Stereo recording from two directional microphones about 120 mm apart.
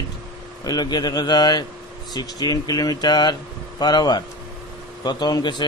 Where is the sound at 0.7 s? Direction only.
35° left (ahead or behind).